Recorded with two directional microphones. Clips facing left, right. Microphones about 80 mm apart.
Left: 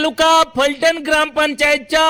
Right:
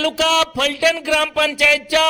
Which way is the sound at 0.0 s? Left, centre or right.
Left.